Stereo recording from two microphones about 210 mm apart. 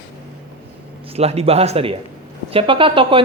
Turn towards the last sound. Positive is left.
turn(degrees=-25)  # may be behind; listen again after turning